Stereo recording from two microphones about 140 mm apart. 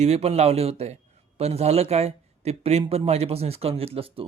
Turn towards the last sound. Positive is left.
turn(degrees=-45)  # may be behind; listen again after turning